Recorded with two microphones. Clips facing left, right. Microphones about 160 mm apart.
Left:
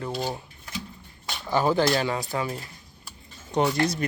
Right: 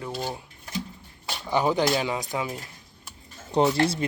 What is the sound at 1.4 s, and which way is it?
Speech, 20° right (ahead or behind).